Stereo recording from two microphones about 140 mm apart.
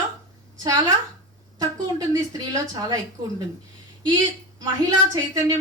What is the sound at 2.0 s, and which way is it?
A woman's voice, 30° right (ahead or behind).